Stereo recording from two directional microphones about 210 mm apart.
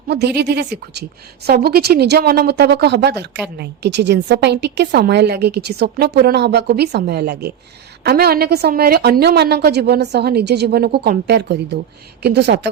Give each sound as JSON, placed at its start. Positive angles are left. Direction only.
{"t": 0.1, "sound": "speech", "side_deg": -50}